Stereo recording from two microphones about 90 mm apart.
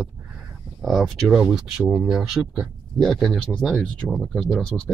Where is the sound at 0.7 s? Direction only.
Centre (ahead or behind).